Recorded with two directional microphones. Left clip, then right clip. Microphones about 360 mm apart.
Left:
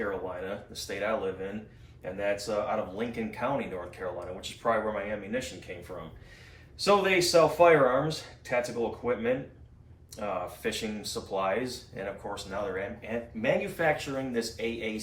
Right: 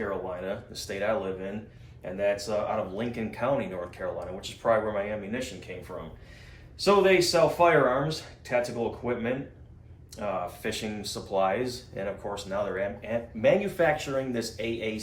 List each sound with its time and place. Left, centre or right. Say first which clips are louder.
0.3 s speech: right 2 dB; centre
6.7 s speech: right 3 dB; centre